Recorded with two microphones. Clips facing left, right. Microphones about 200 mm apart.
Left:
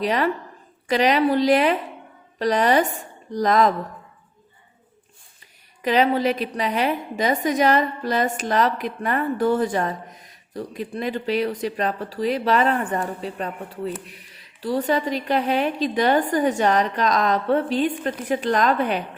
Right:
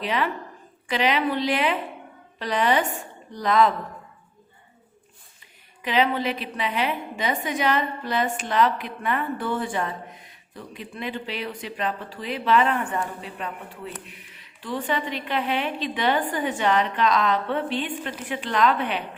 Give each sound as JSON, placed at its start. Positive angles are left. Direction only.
{"t": 0.0, "sound": "a woman's voice", "side_deg": 40}
{"t": 5.8, "sound": "a woman's voice", "side_deg": 40}